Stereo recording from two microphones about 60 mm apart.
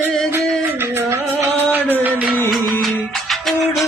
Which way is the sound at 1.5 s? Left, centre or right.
Right.